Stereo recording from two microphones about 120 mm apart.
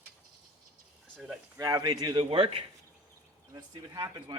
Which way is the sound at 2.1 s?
50° right (ahead or behind).